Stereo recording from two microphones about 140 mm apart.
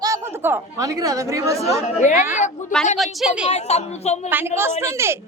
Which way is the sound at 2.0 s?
60° left (ahead or behind).